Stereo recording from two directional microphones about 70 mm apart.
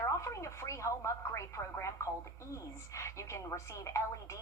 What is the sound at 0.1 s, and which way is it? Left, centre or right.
A woman's voice, left.